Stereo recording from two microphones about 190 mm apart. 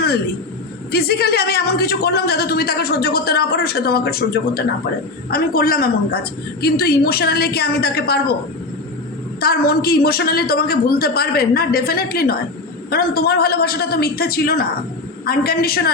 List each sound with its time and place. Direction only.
0.9 s speech: 55° left (ahead or behind)
9.4 s a woman's voice: 55° left (ahead or behind)